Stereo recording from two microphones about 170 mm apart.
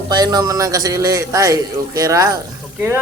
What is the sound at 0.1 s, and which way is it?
A man's voice, 25° right (ahead or behind).